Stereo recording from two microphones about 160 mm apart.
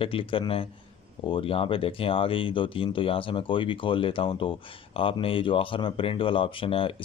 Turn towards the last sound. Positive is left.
turn(degrees=35)  # may be behind; listen again after turning